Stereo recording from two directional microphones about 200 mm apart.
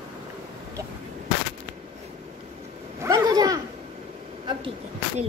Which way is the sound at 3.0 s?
20° right (ahead or behind).